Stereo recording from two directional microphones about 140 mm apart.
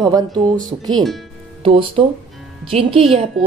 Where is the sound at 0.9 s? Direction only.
Centre (ahead or behind).